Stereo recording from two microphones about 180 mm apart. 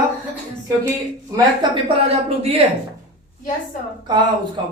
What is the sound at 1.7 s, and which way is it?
Speech, 35° right (ahead or behind).